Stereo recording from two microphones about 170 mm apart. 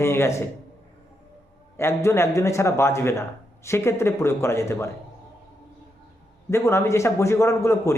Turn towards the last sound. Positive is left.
turn(degrees=15)  # may be behind; listen again after turning